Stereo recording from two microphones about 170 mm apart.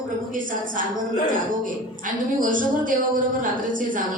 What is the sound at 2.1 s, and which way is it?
A woman's voice, 50° right (ahead or behind).